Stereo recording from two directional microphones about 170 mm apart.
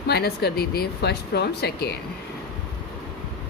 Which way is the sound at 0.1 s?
70° left (ahead or behind).